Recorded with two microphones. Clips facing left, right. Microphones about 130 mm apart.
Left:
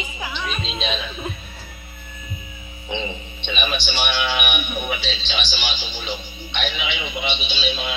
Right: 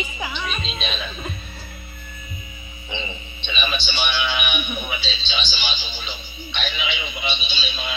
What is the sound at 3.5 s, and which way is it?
A man's voice, 55° left (ahead or behind).